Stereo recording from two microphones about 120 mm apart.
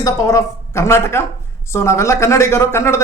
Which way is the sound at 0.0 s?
25° left (ahead or behind).